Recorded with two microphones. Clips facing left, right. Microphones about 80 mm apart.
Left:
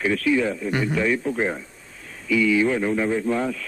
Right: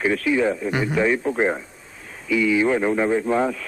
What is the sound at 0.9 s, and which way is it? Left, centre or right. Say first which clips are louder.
Speech: right 5 dB; right.